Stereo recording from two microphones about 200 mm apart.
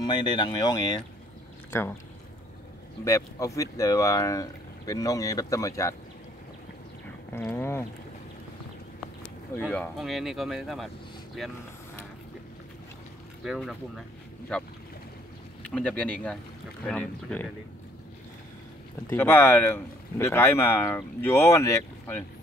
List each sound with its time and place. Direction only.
0.0 s speech: 20° left (ahead or behind)
3.1 s speech: 15° left (ahead or behind)
7.3 s speech: 10° left (ahead or behind)
9.7 s speech: centre (ahead or behind)
13.4 s speech: centre (ahead or behind)
15.6 s speech: 5° left (ahead or behind)
19.0 s speech: 10° left (ahead or behind)